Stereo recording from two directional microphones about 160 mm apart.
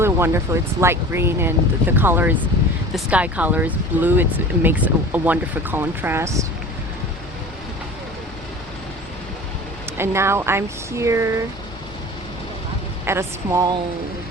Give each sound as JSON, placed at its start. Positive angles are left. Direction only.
{"t": 0.0, "sound": "speech", "side_deg": -15}
{"t": 10.0, "sound": "speech", "side_deg": -15}
{"t": 13.1, "sound": "speech", "side_deg": -15}